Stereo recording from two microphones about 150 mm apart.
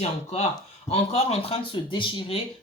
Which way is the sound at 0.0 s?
45° left (ahead or behind).